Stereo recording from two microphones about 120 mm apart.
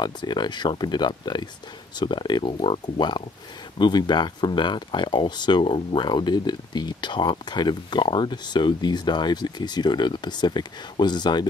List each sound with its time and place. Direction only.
0.0 s speech: 40° left (ahead or behind)